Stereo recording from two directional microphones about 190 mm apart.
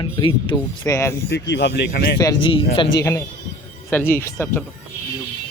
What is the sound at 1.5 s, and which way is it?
Speech, 65° left (ahead or behind).